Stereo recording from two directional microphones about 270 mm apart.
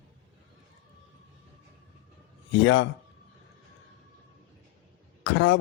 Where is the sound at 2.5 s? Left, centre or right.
Left.